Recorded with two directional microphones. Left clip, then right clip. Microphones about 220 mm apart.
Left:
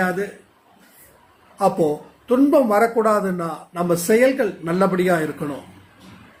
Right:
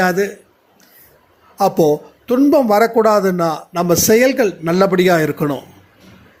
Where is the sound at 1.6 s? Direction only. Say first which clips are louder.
Right 5 dB; 40° right (ahead or behind).